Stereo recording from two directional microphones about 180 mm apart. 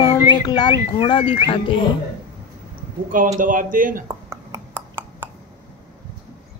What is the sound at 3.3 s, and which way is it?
Speech, 50° right (ahead or behind).